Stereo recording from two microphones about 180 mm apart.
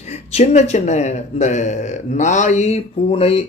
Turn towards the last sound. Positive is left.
turn(degrees=35)  # may be behind; listen again after turning